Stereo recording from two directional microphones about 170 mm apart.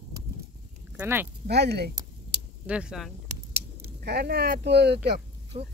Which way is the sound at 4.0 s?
75° right (ahead or behind).